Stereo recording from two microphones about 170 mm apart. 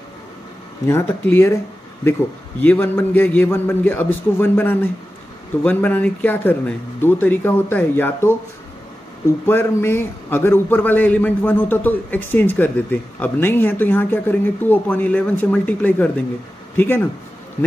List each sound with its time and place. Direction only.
0.8 s a man's voice: 15° left (ahead or behind)
9.5 s a man's voice: 15° left (ahead or behind)